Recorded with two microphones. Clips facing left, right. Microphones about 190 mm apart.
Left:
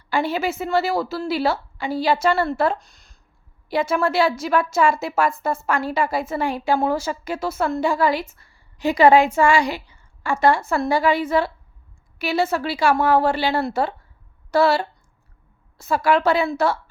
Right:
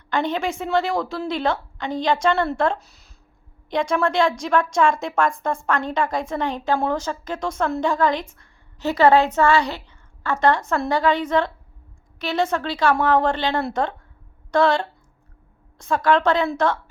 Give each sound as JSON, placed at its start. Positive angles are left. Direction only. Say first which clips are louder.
{"t": 0.1, "sound": "a woman's voice", "louder": "left 1 dB", "side_deg": 10}